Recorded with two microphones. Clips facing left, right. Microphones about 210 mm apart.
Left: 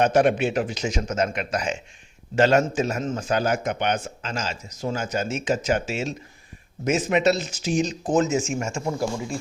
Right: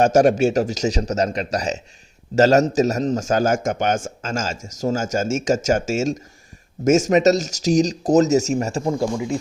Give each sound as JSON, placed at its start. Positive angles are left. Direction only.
{"t": 0.0, "sound": "a man's voice", "side_deg": -45}
{"t": 8.9, "sound": "speech", "side_deg": -20}